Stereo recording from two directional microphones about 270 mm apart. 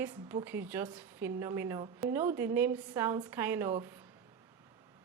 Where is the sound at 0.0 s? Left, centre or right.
Centre.